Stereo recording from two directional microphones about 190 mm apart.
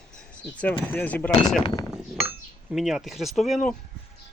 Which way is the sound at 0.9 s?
10° left (ahead or behind).